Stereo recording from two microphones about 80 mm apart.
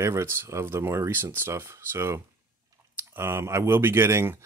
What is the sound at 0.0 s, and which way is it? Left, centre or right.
Speech, right.